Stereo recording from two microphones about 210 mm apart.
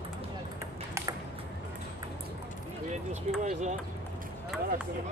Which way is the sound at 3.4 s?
35° right (ahead or behind).